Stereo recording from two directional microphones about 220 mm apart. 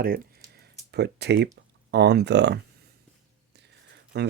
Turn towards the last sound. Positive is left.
turn(degrees=-50)  # may be behind; listen again after turning